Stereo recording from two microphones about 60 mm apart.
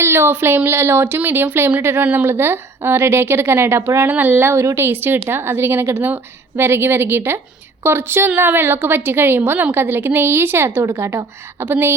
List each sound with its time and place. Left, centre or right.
0.0 s a woman's voice: right
4.1 s a woman's voice: right
10.8 s a woman's voice: right
11.6 s speech: right